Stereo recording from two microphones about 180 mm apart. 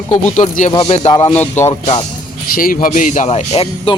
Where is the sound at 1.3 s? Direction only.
10° left (ahead or behind).